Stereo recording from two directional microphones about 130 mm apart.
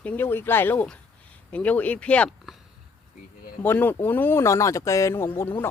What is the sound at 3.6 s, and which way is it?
Speech, 15° left (ahead or behind).